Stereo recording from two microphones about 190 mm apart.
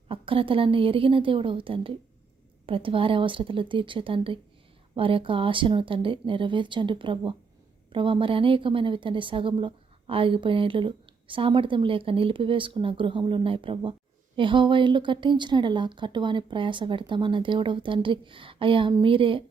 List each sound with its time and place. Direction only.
0.1 s a woman's voice: 30° right (ahead or behind)